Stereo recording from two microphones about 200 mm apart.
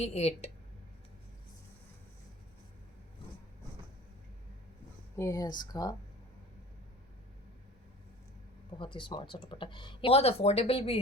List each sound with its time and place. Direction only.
0.0 s a woman's voice: 30° left (ahead or behind)
5.1 s speech: 15° left (ahead or behind)
8.8 s speech: 25° left (ahead or behind)